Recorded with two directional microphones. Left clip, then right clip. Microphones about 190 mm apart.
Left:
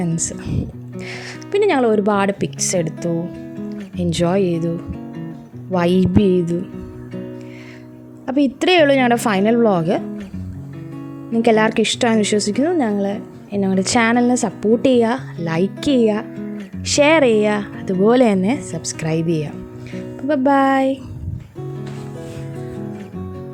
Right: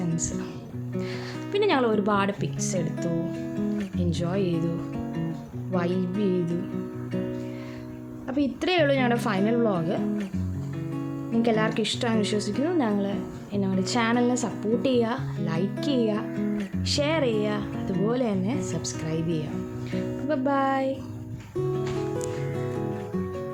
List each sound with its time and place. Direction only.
0.4 s a woman's voice: 30° left (ahead or behind)
3.1 s music: centre (ahead or behind)
3.9 s a woman's voice: 40° left (ahead or behind)
4.9 s music: centre (ahead or behind)
5.7 s speech: 45° left (ahead or behind)
6.2 s speech: centre (ahead or behind)
7.1 s music: centre (ahead or behind)
8.3 s a woman's voice: 40° left (ahead or behind)
10.9 s music: centre (ahead or behind)
11.4 s a woman's voice: 35° left (ahead or behind)
16.3 s guitar: centre (ahead or behind)
16.8 s a woman's voice: 40° left (ahead or behind)